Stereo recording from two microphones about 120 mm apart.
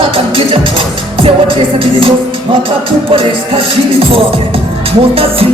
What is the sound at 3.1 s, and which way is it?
Music, 50° right (ahead or behind).